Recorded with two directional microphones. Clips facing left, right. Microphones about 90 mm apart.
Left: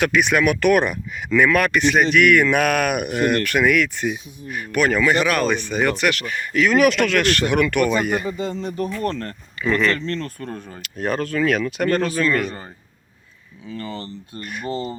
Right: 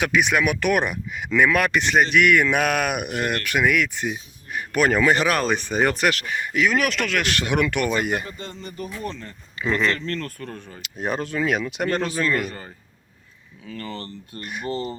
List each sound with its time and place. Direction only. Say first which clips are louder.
0.0 s speech: left 3 dB; 15° right (ahead or behind)
4.8 s speech: left 1 dB; 35° right (ahead or behind); by 6.7 s 15° right (ahead or behind)
6.7 s speech: left 9 dB; 5° left (ahead or behind)
7.2 s speech: left 4 dB; 20° right (ahead or behind)
8.6 s speech: left 5 dB; 90° left
9.0 s speech: left 7 dB; 60° left (ahead or behind)
9.6 s speech: left 3 dB; 25° right (ahead or behind)
10.1 s speech: left 3 dB; 25° left (ahead or behind)
10.8 s speech: left 3 dB; 20° right (ahead or behind)
13.7 s speech: left 3 dB; 20° left (ahead or behind)
14.4 s speech: left 1 dB; 15° right (ahead or behind)
14.7 s speech: left 1 dB; 20° left (ahead or behind)